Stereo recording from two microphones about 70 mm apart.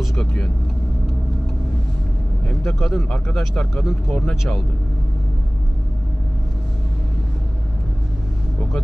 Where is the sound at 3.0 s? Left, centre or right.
Centre.